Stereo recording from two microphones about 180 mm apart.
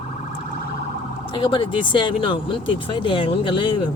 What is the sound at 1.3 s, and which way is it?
Speech, 30° left (ahead or behind).